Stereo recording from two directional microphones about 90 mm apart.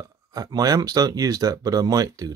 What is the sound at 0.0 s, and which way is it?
Speech, 40° right (ahead or behind).